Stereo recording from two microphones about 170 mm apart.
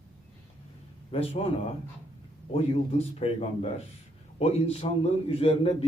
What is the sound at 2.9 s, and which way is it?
Speech, 40° left (ahead or behind).